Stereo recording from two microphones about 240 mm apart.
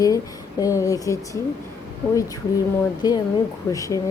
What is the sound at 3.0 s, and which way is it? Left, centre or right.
Speech, centre.